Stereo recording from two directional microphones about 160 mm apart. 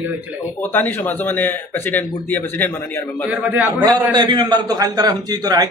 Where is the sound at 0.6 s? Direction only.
10° left (ahead or behind).